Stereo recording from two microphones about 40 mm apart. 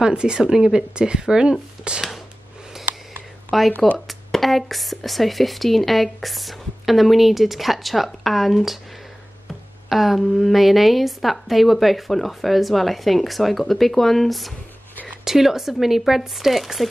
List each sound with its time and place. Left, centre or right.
0.0 s speech: right
3.5 s speech: centre
9.8 s speech: centre
15.2 s speech: centre